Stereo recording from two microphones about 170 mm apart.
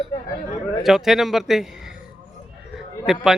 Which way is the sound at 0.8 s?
Centre (ahead or behind).